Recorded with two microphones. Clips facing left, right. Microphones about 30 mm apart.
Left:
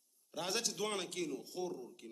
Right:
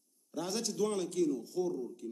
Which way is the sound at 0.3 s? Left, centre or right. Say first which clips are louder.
Right 2 dB; left.